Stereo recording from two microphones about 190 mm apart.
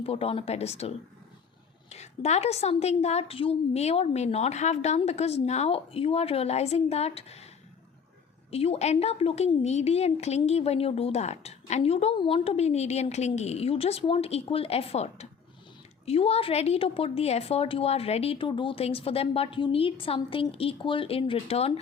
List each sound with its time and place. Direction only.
0.0 s a woman's voice: 30° left (ahead or behind)
8.4 s a woman's voice: 30° left (ahead or behind)